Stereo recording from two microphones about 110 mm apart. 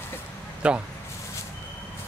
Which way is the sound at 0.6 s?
10° right (ahead or behind).